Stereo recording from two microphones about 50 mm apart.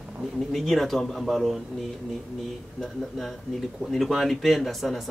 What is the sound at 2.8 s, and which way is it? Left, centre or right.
Speech, centre.